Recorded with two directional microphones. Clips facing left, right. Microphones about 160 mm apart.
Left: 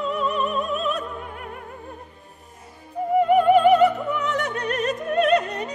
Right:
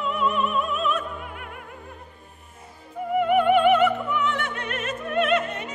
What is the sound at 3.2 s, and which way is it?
Opera, 35° left (ahead or behind).